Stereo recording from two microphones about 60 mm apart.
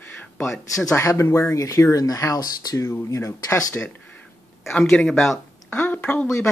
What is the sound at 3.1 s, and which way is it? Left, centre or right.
Speech, left.